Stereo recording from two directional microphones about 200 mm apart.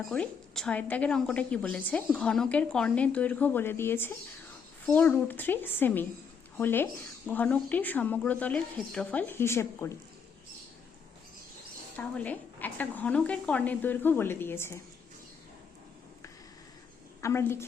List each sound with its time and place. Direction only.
0.1 s a woman's voice: 5° left (ahead or behind)
11.9 s a woman's voice: 10° left (ahead or behind)
17.2 s a woman's voice: 15° left (ahead or behind)